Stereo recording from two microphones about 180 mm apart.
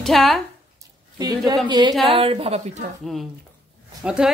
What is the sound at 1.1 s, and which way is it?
A woman's voice, 20° right (ahead or behind).